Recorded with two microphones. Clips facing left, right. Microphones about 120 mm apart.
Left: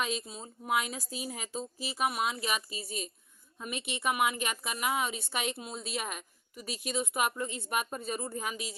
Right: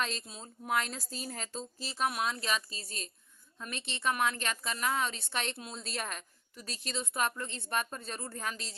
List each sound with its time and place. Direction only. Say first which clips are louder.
0.0 s a woman's voice: left 2 dB; 5° left (ahead or behind)